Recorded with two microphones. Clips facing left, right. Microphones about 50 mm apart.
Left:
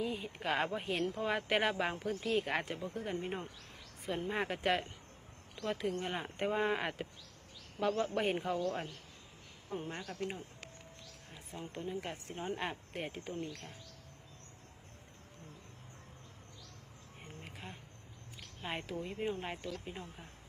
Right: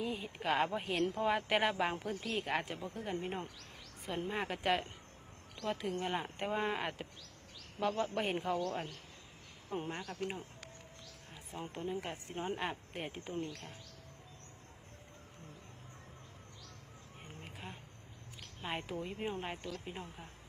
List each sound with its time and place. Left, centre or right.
0.0 s speech: centre
9.6 s speech: centre
10.1 s speech: centre
11.5 s speech: centre
11.9 s speech: centre
17.4 s a sound: centre
18.6 s speech: centre